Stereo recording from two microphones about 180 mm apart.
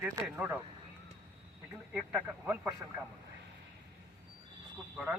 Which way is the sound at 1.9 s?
5° right (ahead or behind).